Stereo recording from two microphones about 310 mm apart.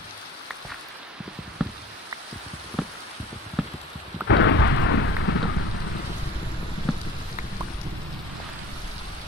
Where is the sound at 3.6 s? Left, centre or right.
Centre.